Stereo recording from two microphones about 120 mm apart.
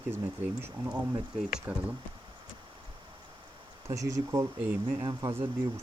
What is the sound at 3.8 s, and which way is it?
Speech, 25° right (ahead or behind).